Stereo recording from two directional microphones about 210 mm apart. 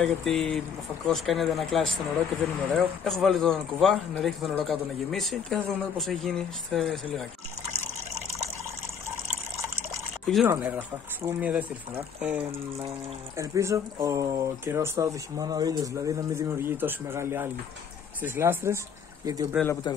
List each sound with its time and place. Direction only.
0.0 s speech: centre (ahead or behind)
10.2 s speech: centre (ahead or behind); by 19.5 s 15° right (ahead or behind)